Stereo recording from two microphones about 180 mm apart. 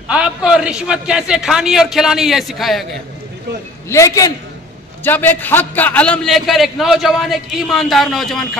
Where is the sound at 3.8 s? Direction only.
15° left (ahead or behind).